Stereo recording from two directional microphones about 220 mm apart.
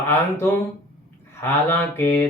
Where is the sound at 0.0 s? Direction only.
10° left (ahead or behind).